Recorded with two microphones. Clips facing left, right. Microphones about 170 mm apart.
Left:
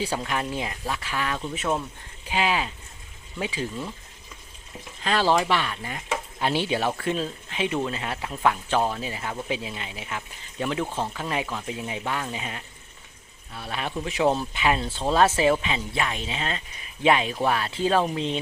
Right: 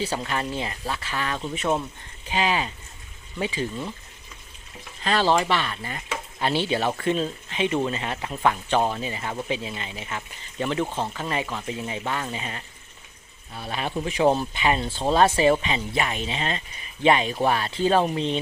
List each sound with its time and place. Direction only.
0.3 s speech: 10° left (ahead or behind)
5.0 s speech: 10° left (ahead or behind)